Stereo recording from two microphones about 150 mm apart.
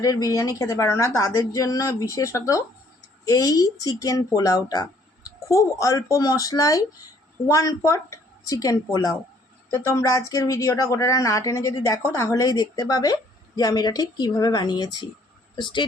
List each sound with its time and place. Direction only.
0.0 s speech: 25° left (ahead or behind)